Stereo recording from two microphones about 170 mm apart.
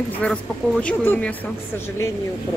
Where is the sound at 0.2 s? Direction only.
5° left (ahead or behind).